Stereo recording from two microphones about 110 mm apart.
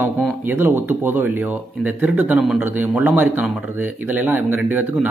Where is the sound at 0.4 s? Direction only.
20° right (ahead or behind).